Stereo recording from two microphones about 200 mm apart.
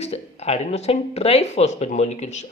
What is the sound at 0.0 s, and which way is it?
Speech, 30° left (ahead or behind).